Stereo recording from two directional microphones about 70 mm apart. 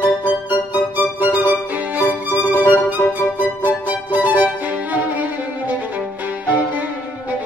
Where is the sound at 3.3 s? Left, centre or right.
Right.